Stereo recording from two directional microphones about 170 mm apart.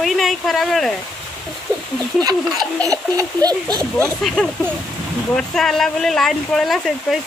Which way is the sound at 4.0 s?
5° left (ahead or behind).